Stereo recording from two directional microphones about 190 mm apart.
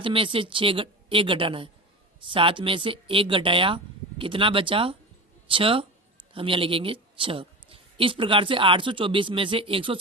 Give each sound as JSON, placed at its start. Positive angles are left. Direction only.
{"t": 0.0, "sound": "a woman's voice", "side_deg": -25}